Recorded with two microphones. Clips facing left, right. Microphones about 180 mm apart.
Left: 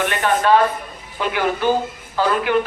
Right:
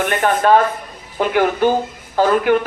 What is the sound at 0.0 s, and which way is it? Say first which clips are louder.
Speech: right 2 dB; 45° right (ahead or behind).